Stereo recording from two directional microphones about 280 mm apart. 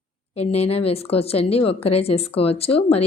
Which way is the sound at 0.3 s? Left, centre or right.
Left.